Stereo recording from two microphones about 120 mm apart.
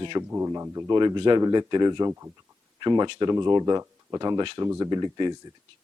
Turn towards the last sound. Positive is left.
turn(degrees=-35)  # may be behind; listen again after turning